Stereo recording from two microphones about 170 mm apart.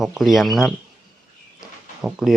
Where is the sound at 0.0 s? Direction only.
Centre (ahead or behind).